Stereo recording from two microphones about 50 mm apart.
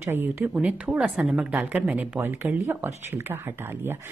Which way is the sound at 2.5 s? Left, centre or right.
Right.